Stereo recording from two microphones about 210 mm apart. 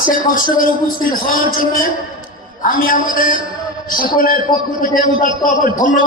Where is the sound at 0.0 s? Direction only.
40° left (ahead or behind).